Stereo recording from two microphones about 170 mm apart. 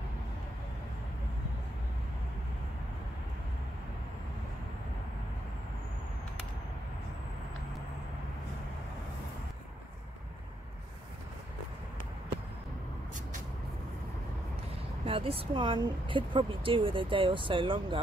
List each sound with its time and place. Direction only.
15.0 s speech: 35° right (ahead or behind)